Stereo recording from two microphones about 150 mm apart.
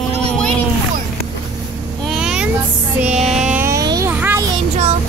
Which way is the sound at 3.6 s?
20° right (ahead or behind).